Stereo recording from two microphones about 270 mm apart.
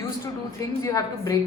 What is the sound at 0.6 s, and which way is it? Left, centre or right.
Speech, centre.